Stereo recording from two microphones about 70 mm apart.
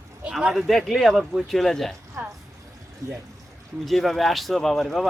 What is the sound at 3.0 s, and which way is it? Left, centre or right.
Speech, right.